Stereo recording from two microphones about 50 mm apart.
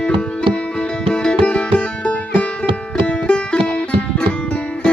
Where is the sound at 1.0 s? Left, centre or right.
Centre.